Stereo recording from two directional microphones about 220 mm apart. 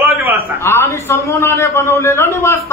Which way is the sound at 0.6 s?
10° left (ahead or behind).